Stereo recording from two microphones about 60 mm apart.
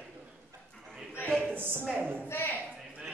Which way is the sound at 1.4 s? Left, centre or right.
Right.